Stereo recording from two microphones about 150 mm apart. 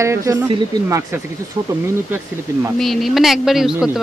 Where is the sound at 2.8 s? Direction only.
Centre (ahead or behind).